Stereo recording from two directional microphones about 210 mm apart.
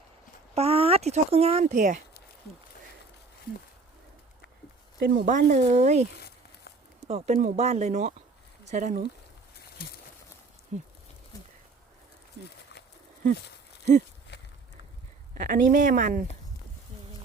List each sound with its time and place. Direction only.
0.5 s speech: 30° right (ahead or behind)
4.9 s speech: 50° right (ahead or behind)
5.3 s speech: 35° right (ahead or behind)
7.1 s speech: 30° right (ahead or behind)
10.7 s speech: 35° right (ahead or behind)
14.3 s a sound: 55° left (ahead or behind)
15.4 s speech: 40° right (ahead or behind)